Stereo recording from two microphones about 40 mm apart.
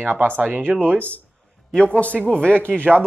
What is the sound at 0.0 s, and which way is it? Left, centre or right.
Speech, right.